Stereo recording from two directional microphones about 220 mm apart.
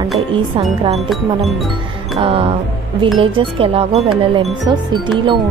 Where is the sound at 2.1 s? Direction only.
25° right (ahead or behind).